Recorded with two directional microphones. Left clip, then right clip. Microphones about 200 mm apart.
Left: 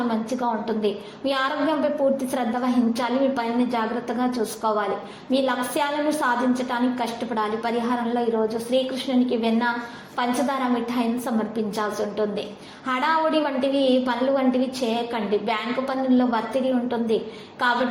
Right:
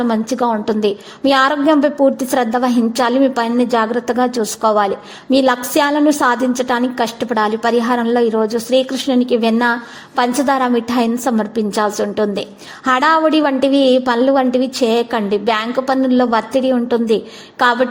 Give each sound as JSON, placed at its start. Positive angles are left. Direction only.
{"t": 0.1, "sound": "a woman's voice", "side_deg": -50}